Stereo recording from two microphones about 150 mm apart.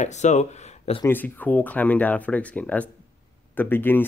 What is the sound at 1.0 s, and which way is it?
Speech, 10° left (ahead or behind).